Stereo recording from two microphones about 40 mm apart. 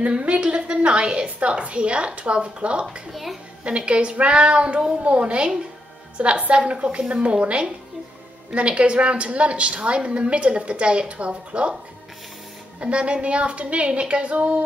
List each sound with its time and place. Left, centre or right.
0.0 s a woman's voice: right
3.1 s a child's voice: centre
3.6 s a woman's voice: right
12.8 s a woman's voice: right